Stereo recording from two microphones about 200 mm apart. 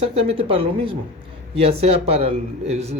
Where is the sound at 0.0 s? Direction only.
30° right (ahead or behind).